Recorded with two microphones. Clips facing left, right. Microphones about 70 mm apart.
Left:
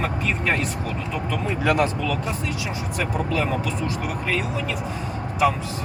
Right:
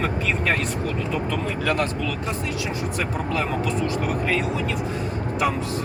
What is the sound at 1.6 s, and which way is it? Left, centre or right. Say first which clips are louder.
Speech: left 4 dB; centre.